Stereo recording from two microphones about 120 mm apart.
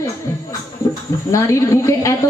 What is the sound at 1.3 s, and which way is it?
Speech, 25° left (ahead or behind).